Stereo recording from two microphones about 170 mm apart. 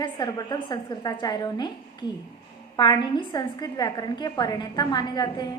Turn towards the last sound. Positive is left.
turn(degrees=25)  # may be behind; listen again after turning